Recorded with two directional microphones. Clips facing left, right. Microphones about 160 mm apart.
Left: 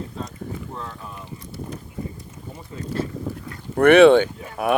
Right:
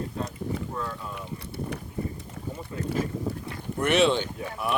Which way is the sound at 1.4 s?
65° right (ahead or behind).